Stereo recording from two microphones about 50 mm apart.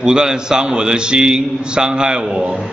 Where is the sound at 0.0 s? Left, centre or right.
Centre.